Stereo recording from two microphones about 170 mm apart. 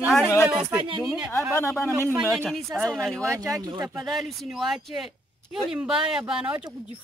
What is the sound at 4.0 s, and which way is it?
Speech, centre (ahead or behind).